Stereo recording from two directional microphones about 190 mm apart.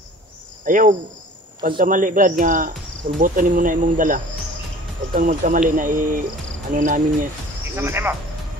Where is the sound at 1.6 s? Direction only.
45° right (ahead or behind).